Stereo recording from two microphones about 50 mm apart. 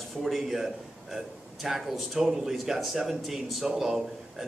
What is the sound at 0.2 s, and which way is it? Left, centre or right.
A man's voice, centre.